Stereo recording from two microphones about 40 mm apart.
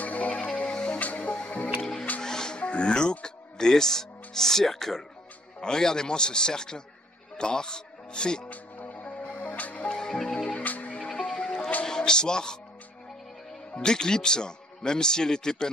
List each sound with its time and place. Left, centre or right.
0.0 s music: left
0.4 s music: left
0.9 s music: left
1.8 s music: centre
5.6 s a man's voice: centre
8.5 s music: left
9.9 s music: centre
10.4 s music: left
11.4 s music: left
13.7 s a man's voice: centre